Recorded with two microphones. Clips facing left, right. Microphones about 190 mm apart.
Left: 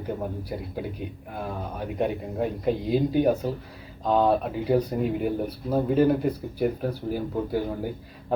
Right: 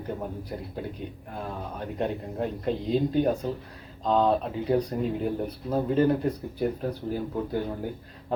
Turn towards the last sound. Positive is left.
turn(degrees=5)  # may be behind; listen again after turning